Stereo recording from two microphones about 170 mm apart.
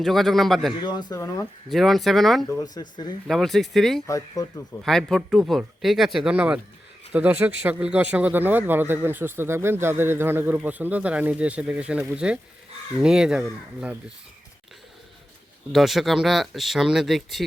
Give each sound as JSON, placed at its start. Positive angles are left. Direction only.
{"t": 0.0, "sound": "speech", "side_deg": 0}
{"t": 0.8, "sound": "speech", "side_deg": 25}
{"t": 1.7, "sound": "speech", "side_deg": 0}
{"t": 2.9, "sound": "speech", "side_deg": 25}
{"t": 3.2, "sound": "speech", "side_deg": 0}
{"t": 4.0, "sound": "speech", "side_deg": 20}
{"t": 4.8, "sound": "a man's voice", "side_deg": 0}
{"t": 15.7, "sound": "speech", "side_deg": 0}